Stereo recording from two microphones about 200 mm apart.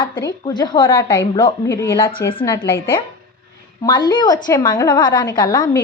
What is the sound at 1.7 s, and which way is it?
Speech, 10° left (ahead or behind).